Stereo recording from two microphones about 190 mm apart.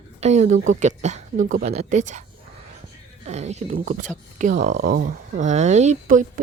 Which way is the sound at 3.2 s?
35° right (ahead or behind).